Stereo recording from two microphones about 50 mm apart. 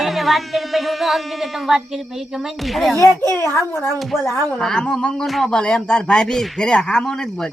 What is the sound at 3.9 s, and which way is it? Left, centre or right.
Speech, centre.